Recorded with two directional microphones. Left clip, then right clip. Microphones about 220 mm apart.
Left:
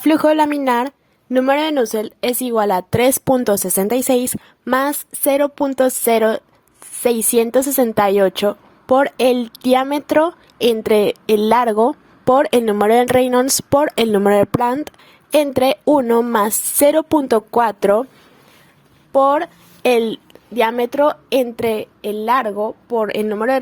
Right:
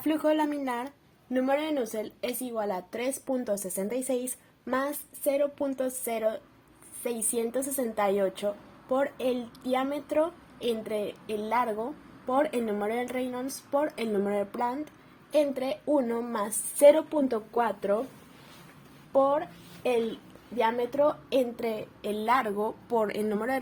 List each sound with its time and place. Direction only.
0.0 s a woman's voice: 40° left (ahead or behind)
19.1 s speech: 40° left (ahead or behind)